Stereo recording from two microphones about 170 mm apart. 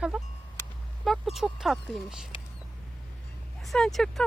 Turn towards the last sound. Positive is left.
turn(degrees=0)  # may be behind; listen again after turning